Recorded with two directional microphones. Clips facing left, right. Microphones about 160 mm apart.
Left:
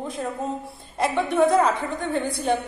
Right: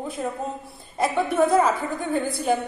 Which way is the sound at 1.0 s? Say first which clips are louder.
Left 1 dB; centre (ahead or behind).